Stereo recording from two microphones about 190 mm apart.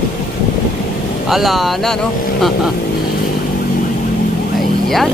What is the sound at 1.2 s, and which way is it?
Speech, centre (ahead or behind).